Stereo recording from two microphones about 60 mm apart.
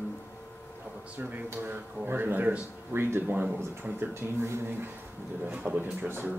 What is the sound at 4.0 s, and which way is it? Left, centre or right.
Speech, right.